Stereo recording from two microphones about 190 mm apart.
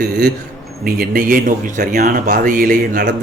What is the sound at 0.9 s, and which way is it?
A man's voice, 50° right (ahead or behind).